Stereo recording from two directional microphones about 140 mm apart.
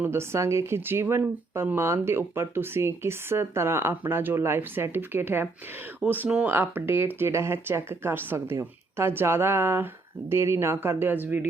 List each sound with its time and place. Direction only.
0.0 s speech: 20° right (ahead or behind)